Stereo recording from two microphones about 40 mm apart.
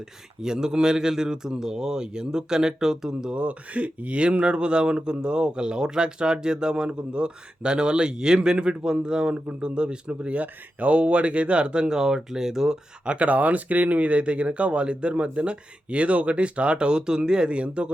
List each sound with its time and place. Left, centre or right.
0.4 s a man's voice: centre
3.3 s speech: right; by 12.7 s centre
13.1 s speech: right